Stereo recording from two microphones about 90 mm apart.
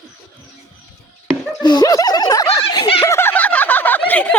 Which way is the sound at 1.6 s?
45° left (ahead or behind).